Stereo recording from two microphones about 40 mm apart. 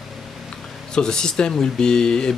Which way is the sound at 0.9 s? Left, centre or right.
Centre.